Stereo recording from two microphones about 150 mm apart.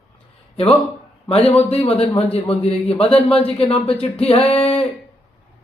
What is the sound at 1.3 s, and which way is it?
A man's voice, 40° left (ahead or behind).